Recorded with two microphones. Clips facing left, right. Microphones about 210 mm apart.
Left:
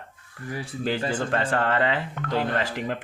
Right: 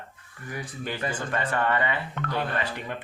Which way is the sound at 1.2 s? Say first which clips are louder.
Left 3 dB; 90° left.